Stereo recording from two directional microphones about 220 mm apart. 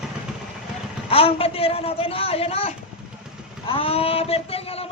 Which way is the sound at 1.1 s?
25° left (ahead or behind).